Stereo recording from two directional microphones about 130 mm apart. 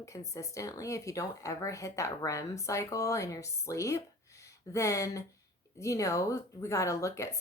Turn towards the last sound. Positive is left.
turn(degrees=25)  # may be behind; listen again after turning